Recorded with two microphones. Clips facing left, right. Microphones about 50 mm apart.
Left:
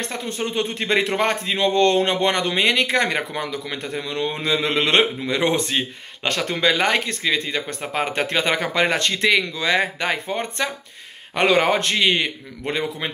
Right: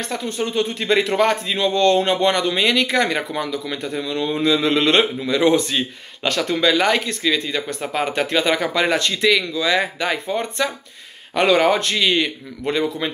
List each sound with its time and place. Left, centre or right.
0.0 s speech: left